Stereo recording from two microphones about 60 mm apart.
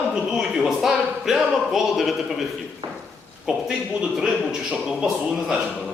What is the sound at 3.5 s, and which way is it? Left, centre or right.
A man's voice, centre.